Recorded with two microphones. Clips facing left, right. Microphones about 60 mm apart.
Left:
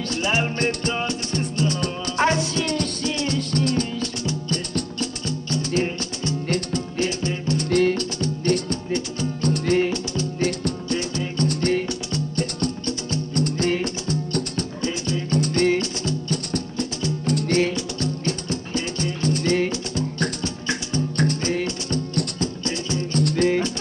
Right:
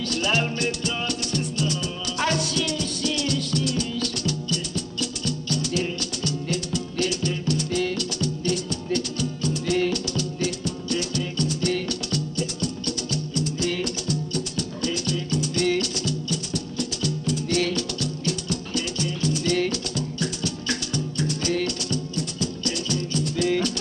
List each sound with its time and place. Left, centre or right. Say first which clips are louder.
0.1 s music: left 1 dB; left
0.6 s music: left 3 dB; left
4.0 s music: left 1 dB; left
4.5 s music: left 3 dB; left
7.0 s music: even; left
7.6 s music: left 6 dB; left
9.8 s music: left 2 dB; left
11.4 s music: left 5 dB; left
12.8 s music: left 2 dB; left
13.4 s music: left 5 dB; left
23.1 s music: left 6 dB; left